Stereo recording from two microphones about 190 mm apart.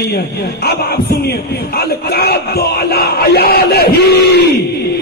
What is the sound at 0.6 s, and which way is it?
Speech, 55° left (ahead or behind).